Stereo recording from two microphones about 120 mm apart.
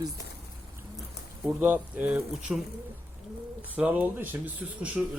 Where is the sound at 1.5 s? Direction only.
15° right (ahead or behind).